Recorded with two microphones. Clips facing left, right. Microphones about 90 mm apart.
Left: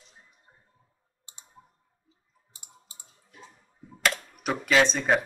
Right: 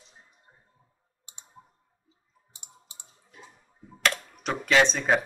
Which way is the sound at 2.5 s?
20° right (ahead or behind).